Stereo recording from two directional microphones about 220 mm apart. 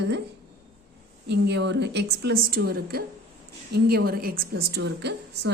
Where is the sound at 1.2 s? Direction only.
50° right (ahead or behind).